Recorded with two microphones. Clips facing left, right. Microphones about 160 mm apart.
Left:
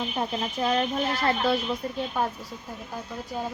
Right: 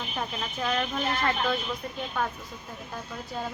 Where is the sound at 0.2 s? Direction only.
30° left (ahead or behind).